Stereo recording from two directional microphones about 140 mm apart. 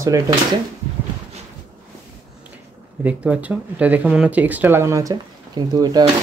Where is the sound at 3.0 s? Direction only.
10° right (ahead or behind); by 6.0 s 30° right (ahead or behind).